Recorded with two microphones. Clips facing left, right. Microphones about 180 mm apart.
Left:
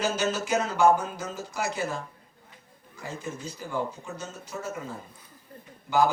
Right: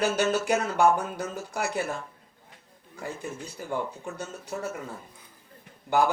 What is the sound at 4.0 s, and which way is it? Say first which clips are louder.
Speech: right 2 dB; 60° right (ahead or behind).